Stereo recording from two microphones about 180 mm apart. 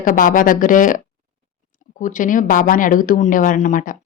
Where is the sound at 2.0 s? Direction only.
45° left (ahead or behind).